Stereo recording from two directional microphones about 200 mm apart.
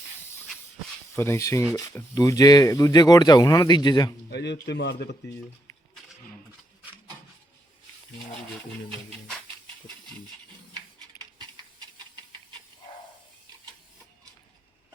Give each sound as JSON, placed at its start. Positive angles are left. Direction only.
{"t": 1.1, "sound": "speech", "side_deg": 15}
{"t": 4.3, "sound": "speech", "side_deg": 60}